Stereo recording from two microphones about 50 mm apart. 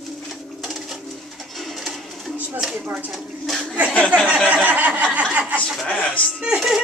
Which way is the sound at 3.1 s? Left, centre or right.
Centre.